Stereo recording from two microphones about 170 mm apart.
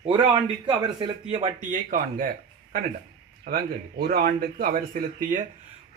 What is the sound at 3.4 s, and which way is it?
A man's voice, 60° right (ahead or behind).